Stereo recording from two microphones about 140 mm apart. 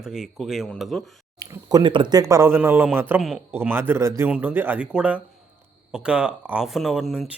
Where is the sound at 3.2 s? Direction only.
Centre (ahead or behind).